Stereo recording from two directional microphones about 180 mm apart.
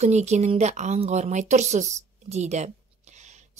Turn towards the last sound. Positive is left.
turn(degrees=-40)  # may be behind; listen again after turning